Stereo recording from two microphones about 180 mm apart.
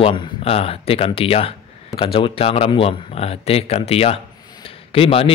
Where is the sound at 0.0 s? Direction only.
30° left (ahead or behind).